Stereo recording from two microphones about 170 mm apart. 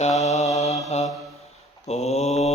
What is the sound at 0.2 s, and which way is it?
Mantra, 40° left (ahead or behind).